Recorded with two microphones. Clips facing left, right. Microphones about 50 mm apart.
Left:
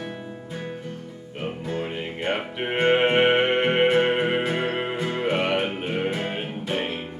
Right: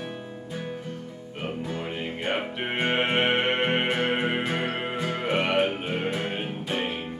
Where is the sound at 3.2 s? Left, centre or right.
Centre.